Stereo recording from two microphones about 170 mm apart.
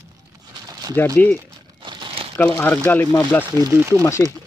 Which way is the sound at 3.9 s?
15° left (ahead or behind).